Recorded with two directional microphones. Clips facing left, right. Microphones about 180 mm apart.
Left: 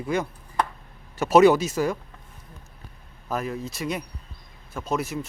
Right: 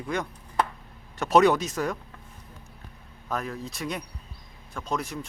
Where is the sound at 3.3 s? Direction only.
5° left (ahead or behind).